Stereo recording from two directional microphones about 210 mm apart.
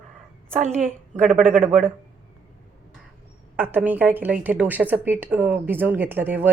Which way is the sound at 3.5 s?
10° right (ahead or behind).